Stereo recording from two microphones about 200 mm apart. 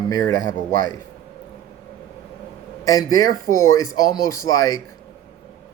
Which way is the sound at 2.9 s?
20° left (ahead or behind).